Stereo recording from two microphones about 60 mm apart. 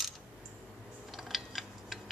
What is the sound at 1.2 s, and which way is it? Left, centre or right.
Tick-tock, centre.